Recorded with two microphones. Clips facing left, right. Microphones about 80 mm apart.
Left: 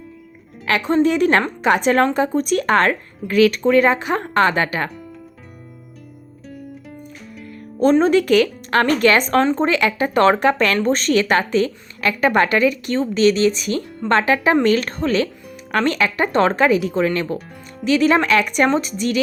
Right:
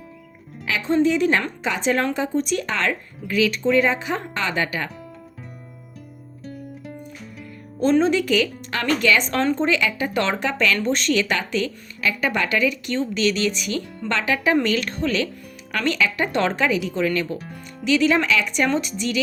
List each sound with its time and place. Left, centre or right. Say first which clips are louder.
0.6 s speech: left 3 dB; left
7.9 s a woman's voice: left 4 dB; left
17.3 s speech: left 4 dB; centre
17.8 s speech: left 3 dB; left